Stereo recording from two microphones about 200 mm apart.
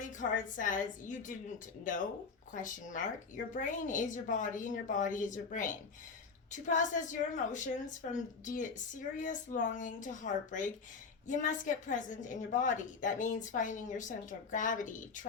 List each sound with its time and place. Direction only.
0.0 s a woman's voice: 40° left (ahead or behind)